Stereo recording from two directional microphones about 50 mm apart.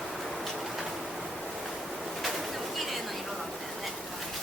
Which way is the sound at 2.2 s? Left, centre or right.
Centre.